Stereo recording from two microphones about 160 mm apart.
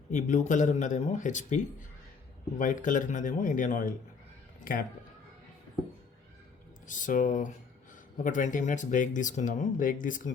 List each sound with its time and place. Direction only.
0.1 s speech: 50° left (ahead or behind)
6.8 s speech: 55° left (ahead or behind)